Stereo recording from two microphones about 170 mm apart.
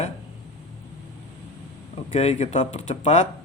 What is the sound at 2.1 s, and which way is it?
A man's voice, 40° left (ahead or behind).